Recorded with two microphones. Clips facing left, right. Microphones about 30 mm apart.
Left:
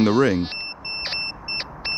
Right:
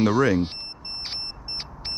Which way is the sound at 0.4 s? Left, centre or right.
Left.